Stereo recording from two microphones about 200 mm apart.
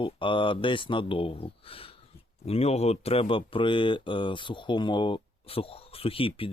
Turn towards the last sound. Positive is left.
turn(degrees=25)  # may be behind; listen again after turning